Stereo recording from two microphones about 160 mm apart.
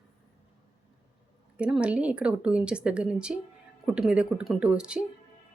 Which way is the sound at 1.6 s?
5° right (ahead or behind).